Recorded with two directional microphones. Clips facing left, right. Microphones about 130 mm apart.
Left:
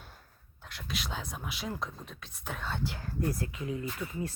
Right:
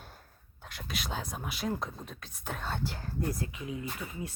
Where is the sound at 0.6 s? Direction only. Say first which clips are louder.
Even; 45° right (ahead or behind).